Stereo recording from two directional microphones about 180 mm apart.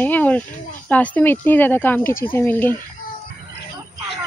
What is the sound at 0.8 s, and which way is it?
Speech, 10° left (ahead or behind).